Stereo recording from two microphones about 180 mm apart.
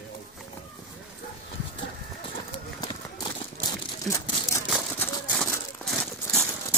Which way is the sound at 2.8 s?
25° left (ahead or behind).